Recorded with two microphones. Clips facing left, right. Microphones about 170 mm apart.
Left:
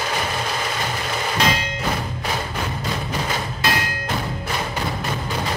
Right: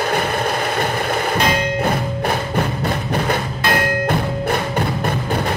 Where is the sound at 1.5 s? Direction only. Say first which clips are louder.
Right 7 dB; 55° right (ahead or behind).